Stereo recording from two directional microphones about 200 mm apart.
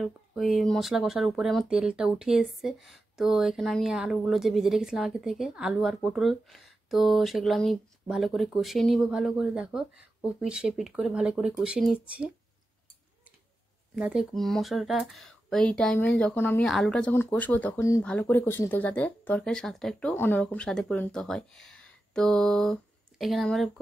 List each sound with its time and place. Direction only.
0.0 s speech: centre (ahead or behind)
13.9 s speech: 5° right (ahead or behind)